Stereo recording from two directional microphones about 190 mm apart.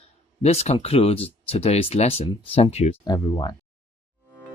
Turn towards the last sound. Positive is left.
turn(degrees=20)  # may be behind; listen again after turning